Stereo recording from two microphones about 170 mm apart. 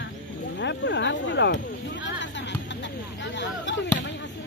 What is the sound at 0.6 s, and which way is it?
Speech, 90° left.